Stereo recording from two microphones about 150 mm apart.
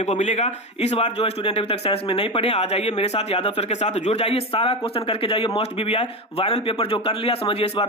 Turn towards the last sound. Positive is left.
turn(degrees=40)  # may be behind; listen again after turning